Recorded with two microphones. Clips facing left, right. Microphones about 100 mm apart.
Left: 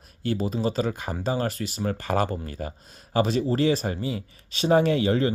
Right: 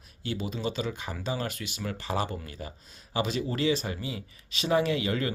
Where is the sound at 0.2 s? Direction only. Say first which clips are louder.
Left 7 dB; 45° left (ahead or behind).